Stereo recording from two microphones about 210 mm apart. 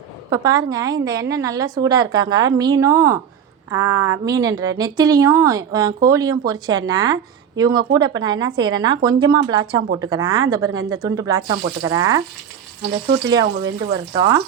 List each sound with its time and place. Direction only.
0.3 s speech: 15° right (ahead or behind)
13.4 s speech: 55° right (ahead or behind)
14.2 s speech: 15° right (ahead or behind)